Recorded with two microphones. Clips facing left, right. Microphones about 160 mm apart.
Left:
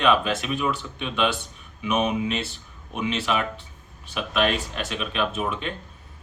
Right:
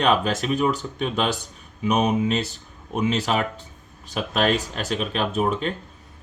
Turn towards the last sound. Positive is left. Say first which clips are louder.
# right 3 dB
turn(degrees=-40)  # may be behind; listen again after turning